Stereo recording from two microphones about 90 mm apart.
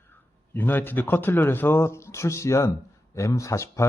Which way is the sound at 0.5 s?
20° left (ahead or behind).